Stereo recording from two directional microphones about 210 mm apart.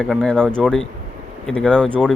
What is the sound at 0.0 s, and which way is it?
A man's voice, 5° left (ahead or behind).